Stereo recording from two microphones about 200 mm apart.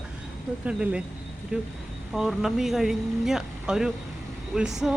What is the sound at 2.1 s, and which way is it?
Speech, centre (ahead or behind).